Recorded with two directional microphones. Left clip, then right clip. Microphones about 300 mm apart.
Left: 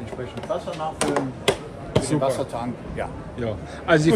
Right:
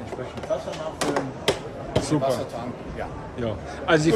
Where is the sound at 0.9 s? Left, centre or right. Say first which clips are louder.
Left 1 dB; centre.